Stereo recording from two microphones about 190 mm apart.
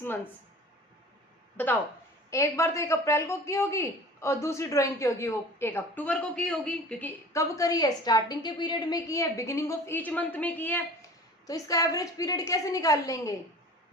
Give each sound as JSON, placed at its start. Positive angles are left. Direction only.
{"t": 1.5, "sound": "speech", "side_deg": 10}